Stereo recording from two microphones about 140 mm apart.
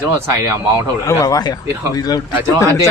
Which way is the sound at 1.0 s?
25° left (ahead or behind).